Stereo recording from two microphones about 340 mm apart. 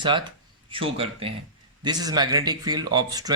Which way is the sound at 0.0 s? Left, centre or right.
Centre.